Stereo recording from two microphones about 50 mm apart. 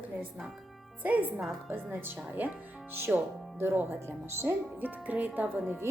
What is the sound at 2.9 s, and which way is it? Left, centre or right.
Speech, right.